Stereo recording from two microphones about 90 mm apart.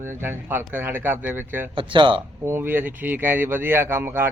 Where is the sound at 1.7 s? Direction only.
70° right (ahead or behind).